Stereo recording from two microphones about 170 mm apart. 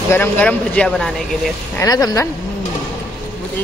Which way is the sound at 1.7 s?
20° left (ahead or behind).